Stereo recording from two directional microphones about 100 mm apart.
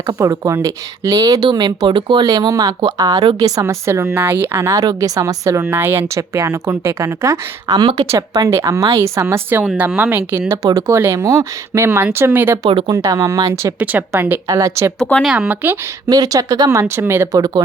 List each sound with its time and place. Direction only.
0.1 s speech: 35° right (ahead or behind); by 2.3 s 55° right (ahead or behind)
2.3 s a woman's voice: 40° right (ahead or behind)
7.8 s speech: 45° right (ahead or behind)
8.3 s a woman's voice: 30° right (ahead or behind)
10.7 s a woman's voice: 30° right (ahead or behind)
12.9 s a woman's voice: 35° right (ahead or behind); by 14.3 s 20° right (ahead or behind)
14.4 s speech: 35° right (ahead or behind)
14.9 s speech: 15° left (ahead or behind)
15.2 s speech: 10° right (ahead or behind)
16.0 s speech: 40° right (ahead or behind)
16.8 s a woman's voice: 25° right (ahead or behind)
17.3 s speech: 40° right (ahead or behind)